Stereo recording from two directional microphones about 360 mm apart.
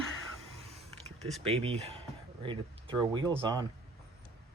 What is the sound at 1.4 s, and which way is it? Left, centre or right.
Speech, centre.